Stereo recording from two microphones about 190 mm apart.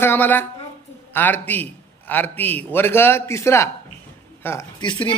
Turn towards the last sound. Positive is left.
turn(degrees=25)  # may be behind; listen again after turning